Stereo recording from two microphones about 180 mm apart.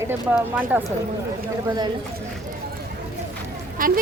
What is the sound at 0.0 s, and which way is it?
Speech, 10° right (ahead or behind).